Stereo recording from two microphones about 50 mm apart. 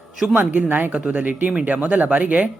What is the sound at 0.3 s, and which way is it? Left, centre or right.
Speech, right.